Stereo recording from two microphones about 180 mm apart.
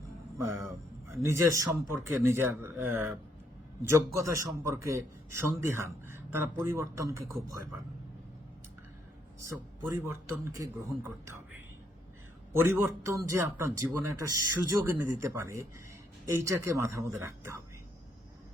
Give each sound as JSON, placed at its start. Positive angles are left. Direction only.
{"t": 0.6, "sound": "a man's voice", "side_deg": -15}
{"t": 9.4, "sound": "a man's voice", "side_deg": -15}
{"t": 12.6, "sound": "a man's voice", "side_deg": -15}